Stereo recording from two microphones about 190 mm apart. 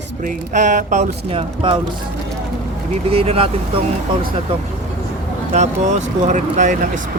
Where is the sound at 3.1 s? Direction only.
30° right (ahead or behind).